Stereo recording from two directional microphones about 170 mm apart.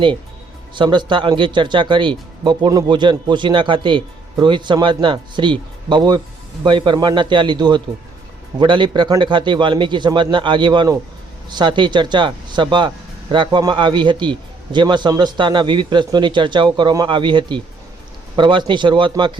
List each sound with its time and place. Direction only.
0.8 s speech: 25° right (ahead or behind)